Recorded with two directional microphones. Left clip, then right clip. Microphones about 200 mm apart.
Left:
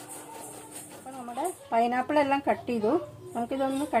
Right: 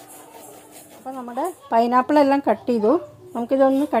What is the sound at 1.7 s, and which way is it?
Speech, 45° right (ahead or behind).